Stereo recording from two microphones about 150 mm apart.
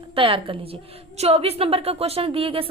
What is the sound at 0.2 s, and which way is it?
A woman's voice, 35° right (ahead or behind).